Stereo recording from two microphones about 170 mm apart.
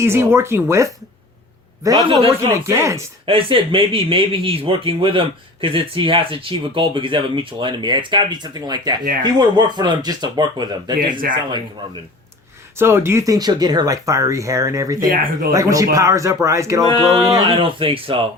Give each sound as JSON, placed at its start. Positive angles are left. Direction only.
{"t": 0.0, "sound": "speech", "side_deg": -15}
{"t": 3.2, "sound": "speech", "side_deg": -30}
{"t": 12.7, "sound": "speech", "side_deg": -15}
{"t": 15.0, "sound": "speech", "side_deg": -55}
{"t": 15.5, "sound": "speech", "side_deg": -20}
{"t": 17.3, "sound": "speech", "side_deg": -30}